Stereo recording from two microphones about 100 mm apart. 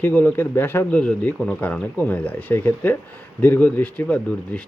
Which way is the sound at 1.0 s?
10° left (ahead or behind).